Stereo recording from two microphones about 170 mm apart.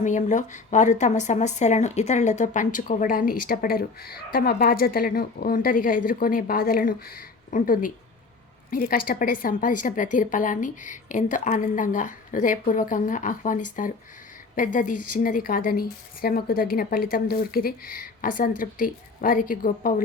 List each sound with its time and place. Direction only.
0.0 s a woman's voice: 45° left (ahead or behind)